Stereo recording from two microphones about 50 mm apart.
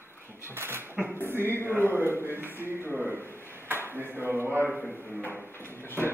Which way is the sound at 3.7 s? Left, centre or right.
Right.